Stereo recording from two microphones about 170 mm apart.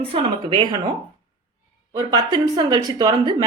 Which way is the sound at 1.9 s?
25° right (ahead or behind).